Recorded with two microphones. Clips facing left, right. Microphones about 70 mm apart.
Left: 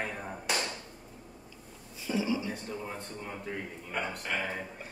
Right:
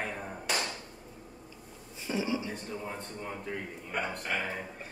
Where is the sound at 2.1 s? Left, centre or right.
Right.